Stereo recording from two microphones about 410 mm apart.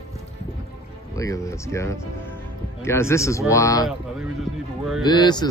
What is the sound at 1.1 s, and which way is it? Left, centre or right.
Speech, centre.